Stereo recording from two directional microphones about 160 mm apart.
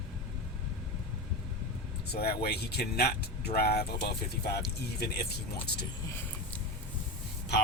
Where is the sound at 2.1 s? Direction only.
75° left (ahead or behind); by 5.2 s 90° left.